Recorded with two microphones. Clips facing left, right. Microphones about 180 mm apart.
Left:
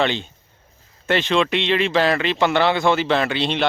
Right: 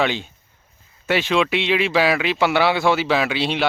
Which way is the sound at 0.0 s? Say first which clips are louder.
Even; 10° right (ahead or behind).